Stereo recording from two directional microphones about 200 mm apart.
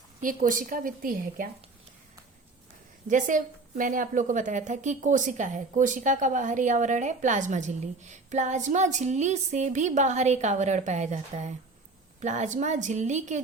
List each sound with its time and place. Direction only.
0.2 s a woman's voice: 40° right (ahead or behind)
3.1 s a woman's voice: 40° right (ahead or behind)